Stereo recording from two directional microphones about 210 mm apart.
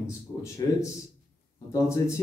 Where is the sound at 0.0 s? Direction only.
15° left (ahead or behind).